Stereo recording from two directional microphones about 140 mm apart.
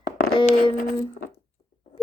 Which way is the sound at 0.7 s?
85° left.